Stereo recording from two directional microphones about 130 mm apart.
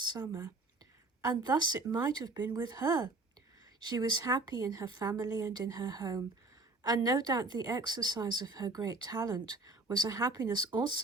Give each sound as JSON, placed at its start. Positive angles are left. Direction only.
{"t": 0.1, "sound": "speech", "side_deg": -30}
{"t": 2.3, "sound": "a woman's voice", "side_deg": -20}
{"t": 2.6, "sound": "a woman's voice", "side_deg": -30}